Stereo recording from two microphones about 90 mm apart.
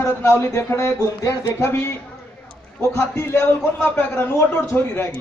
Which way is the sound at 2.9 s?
25° left (ahead or behind).